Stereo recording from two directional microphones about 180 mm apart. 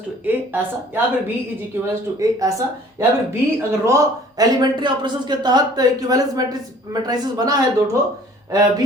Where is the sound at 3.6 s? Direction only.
15° right (ahead or behind).